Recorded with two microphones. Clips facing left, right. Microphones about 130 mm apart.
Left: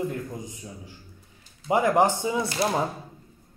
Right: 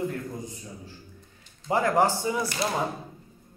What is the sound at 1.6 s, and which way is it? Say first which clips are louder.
Speech: left 2 dB; 15° left (ahead or behind).